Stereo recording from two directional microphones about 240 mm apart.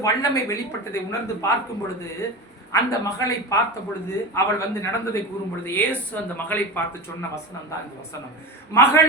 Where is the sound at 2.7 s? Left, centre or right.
Centre.